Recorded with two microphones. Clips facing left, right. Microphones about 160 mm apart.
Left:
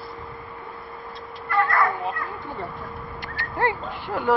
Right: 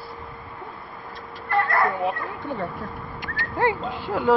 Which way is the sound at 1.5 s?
30° right (ahead or behind).